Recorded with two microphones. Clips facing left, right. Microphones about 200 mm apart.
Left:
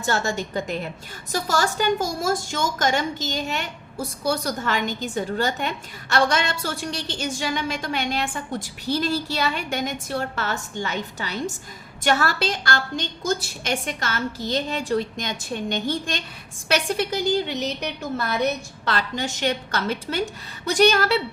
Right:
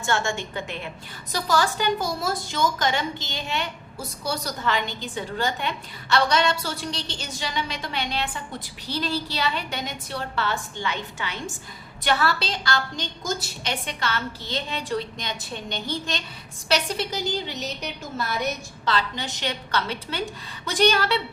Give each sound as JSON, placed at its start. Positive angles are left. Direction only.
{"t": 0.0, "sound": "a woman's voice", "side_deg": 40}
{"t": 18.9, "sound": "a woman's voice", "side_deg": 50}